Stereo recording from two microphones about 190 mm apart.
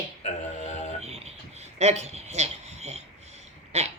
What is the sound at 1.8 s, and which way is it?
A woman's voice, 35° right (ahead or behind).